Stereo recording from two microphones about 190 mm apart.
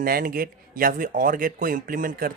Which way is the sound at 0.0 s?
50° right (ahead or behind).